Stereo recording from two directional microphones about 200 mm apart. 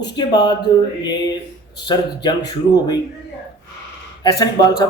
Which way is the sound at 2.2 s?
20° left (ahead or behind).